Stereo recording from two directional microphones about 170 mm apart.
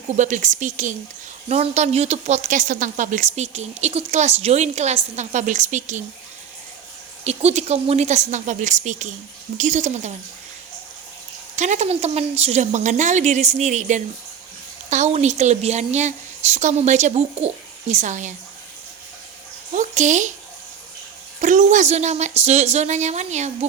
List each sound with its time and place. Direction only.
0.2 s a woman's voice: 45° right (ahead or behind)
7.3 s a woman's voice: 40° right (ahead or behind)
11.5 s a woman's voice: 45° right (ahead or behind)
19.7 s a woman's voice: 45° right (ahead or behind)
21.4 s a woman's voice: 50° right (ahead or behind)